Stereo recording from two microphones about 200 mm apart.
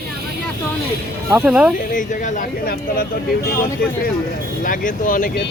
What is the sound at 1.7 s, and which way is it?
Speech, 40° left (ahead or behind).